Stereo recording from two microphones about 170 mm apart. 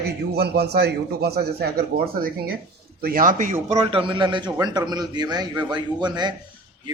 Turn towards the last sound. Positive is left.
turn(degrees=-25)  # may be behind; listen again after turning